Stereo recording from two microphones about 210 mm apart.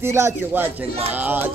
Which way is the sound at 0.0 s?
10° right (ahead or behind).